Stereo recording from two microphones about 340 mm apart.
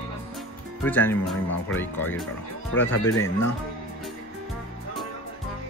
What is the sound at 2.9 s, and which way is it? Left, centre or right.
Speech, left.